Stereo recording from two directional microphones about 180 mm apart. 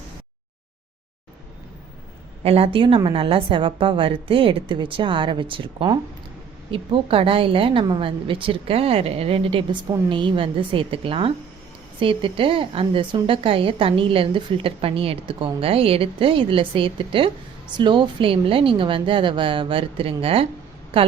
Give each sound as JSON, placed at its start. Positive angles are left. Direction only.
{"t": 2.4, "sound": "a woman's voice", "side_deg": -35}